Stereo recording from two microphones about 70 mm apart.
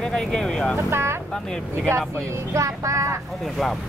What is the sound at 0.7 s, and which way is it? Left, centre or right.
Speech, right.